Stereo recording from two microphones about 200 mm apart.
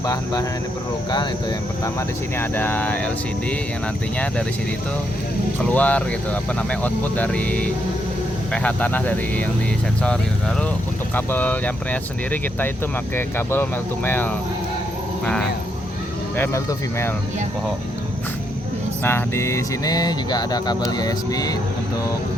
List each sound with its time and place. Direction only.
0.0 s speech: 15° left (ahead or behind)
2.4 s speech: 10° left (ahead or behind)
5.6 s speech: 5° left (ahead or behind)
11.1 s speech: 10° left (ahead or behind)
16.4 s speech: 15° left (ahead or behind)
19.0 s speech: 10° left (ahead or behind)